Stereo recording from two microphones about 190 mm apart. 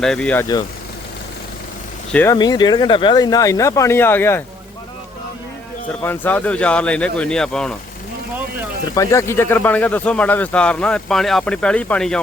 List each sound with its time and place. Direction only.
0.0 s speech: 5° left (ahead or behind)
2.3 s speech: 20° left (ahead or behind)
6.0 s speech: 10° left (ahead or behind)
9.0 s speech: 15° left (ahead or behind)